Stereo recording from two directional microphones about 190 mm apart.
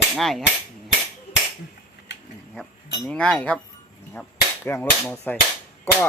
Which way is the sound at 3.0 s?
5° left (ahead or behind).